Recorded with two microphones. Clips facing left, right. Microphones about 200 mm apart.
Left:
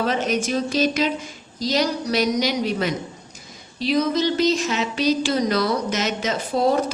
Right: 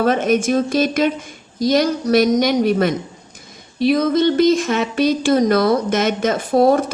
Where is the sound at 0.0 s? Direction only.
50° right (ahead or behind).